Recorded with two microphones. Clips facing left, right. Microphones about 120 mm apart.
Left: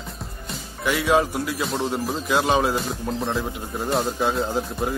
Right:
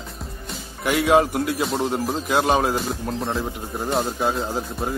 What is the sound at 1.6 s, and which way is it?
Speech, centre (ahead or behind).